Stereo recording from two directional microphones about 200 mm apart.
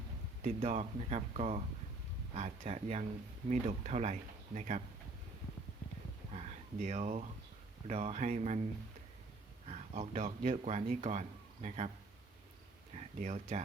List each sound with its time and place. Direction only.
0.4 s speech: 35° right (ahead or behind)
6.3 s a sound: 35° right (ahead or behind)
7.9 s speech: 35° right (ahead or behind)
9.6 s speech: 35° right (ahead or behind)
13.0 s speech: 35° right (ahead or behind)